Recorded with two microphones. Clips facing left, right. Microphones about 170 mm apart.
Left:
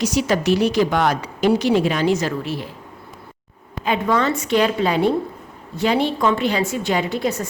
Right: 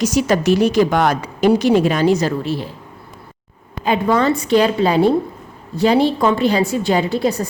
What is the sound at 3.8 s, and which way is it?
A woman's voice, 35° right (ahead or behind).